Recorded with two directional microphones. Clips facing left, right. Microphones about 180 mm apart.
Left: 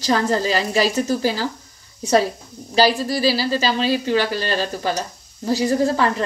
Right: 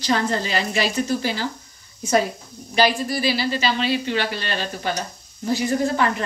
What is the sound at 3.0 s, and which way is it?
Speech, 35° left (ahead or behind).